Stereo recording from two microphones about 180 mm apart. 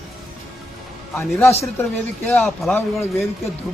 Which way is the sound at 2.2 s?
Centre (ahead or behind).